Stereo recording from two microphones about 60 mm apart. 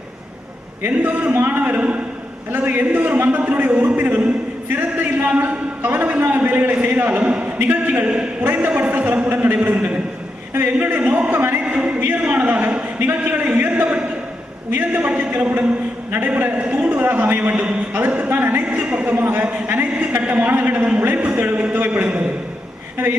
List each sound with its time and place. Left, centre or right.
0.8 s a man's voice: right
8.0 s a man's voice: centre
10.5 s a sound: right
11.6 s a sound: centre
16.3 s a man's voice: right
16.9 s a man's voice: right
17.5 s a man's voice: centre
18.3 s a man's voice: right